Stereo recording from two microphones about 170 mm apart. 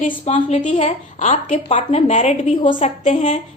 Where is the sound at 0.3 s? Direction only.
45° left (ahead or behind).